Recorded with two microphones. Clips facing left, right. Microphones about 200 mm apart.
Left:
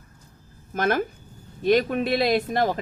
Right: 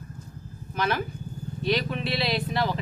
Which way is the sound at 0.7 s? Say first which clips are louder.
Left 4 dB; 45° left (ahead or behind).